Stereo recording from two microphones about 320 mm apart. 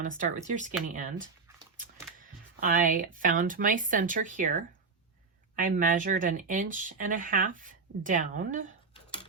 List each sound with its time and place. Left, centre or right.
0.0 s speech: right